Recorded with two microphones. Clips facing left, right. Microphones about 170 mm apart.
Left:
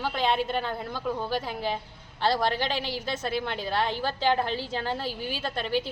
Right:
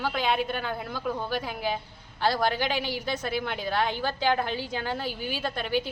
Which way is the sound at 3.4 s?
Centre (ahead or behind).